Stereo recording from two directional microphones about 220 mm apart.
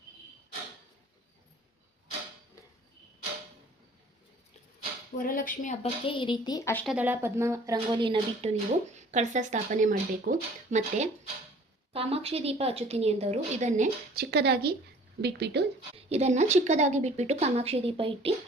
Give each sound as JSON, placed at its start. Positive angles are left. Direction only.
{"t": 5.1, "sound": "speech", "side_deg": 40}
{"t": 6.1, "sound": "speech", "side_deg": 20}
{"t": 6.8, "sound": "speech", "side_deg": -5}
{"t": 14.3, "sound": "speech", "side_deg": -50}
{"t": 16.0, "sound": "speech", "side_deg": -30}